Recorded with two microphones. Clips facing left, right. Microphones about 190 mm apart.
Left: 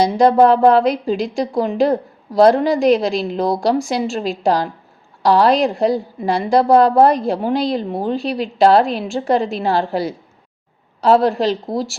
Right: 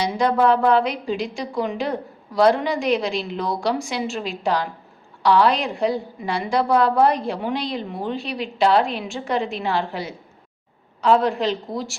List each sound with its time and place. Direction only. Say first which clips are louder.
0.0 s a woman's voice: left 7 dB; 35° left (ahead or behind)